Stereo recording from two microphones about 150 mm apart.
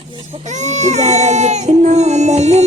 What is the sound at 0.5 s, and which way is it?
Baby cry, 50° right (ahead or behind).